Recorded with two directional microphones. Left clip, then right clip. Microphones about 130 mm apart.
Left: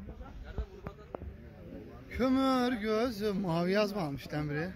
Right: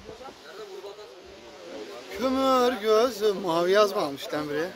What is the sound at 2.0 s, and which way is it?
Speech, 20° right (ahead or behind).